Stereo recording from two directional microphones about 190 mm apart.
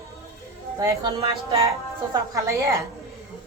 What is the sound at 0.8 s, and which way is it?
Speech, 15° right (ahead or behind).